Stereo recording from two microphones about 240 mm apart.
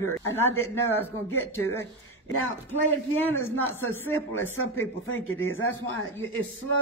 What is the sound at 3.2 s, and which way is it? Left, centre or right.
A man's voice, centre.